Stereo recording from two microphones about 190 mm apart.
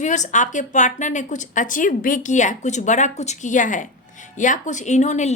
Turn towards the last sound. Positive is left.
turn(degrees=40)  # may be behind; listen again after turning